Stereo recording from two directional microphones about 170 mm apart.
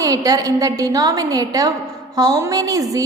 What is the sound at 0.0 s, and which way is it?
A woman's voice, 20° right (ahead or behind).